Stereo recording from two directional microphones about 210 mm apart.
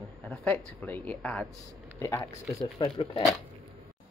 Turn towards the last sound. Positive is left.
turn(degrees=20)  # may be behind; listen again after turning